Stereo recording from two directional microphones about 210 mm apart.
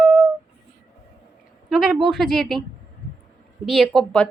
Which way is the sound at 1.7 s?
5° right (ahead or behind).